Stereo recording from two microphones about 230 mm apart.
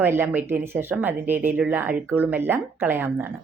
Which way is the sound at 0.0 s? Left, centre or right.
Centre.